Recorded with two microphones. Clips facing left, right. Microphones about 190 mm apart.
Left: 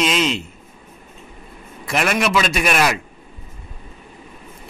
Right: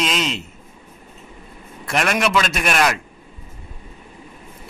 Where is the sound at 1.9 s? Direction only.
Centre (ahead or behind).